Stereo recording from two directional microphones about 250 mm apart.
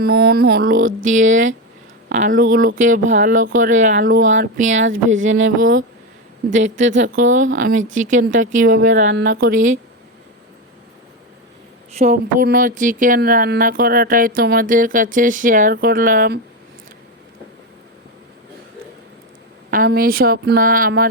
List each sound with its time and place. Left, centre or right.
0.0 s speech: right
11.9 s speech: right
19.7 s speech: right